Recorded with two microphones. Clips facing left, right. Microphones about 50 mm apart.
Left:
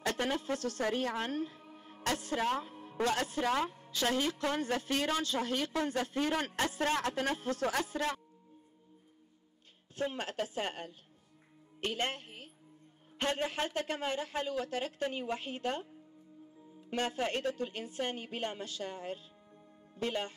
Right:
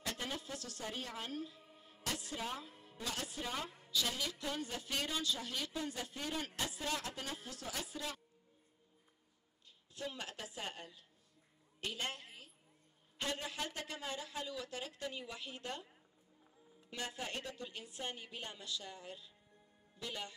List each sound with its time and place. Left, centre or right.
0.0 s a woman's voice: left
2.8 s a man's voice: left
3.6 s a woman's voice: left
9.9 s a woman's voice: left
16.9 s speech: left